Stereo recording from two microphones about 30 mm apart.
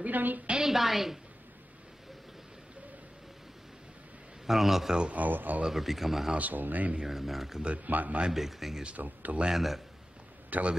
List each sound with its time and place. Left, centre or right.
0.1 s a woman's voice: right
0.6 s a woman's voice: centre
4.5 s a woman's voice: centre
5.1 s speech: right
5.7 s a woman's voice: centre
6.3 s speech: right
7.0 s a woman's voice: centre
7.8 s speech: right
8.3 s a woman's voice: centre
8.9 s speech: right
9.5 s a woman's voice: centre
10.5 s speech: right